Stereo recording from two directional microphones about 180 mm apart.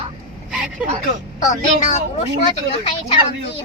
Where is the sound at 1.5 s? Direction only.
40° left (ahead or behind).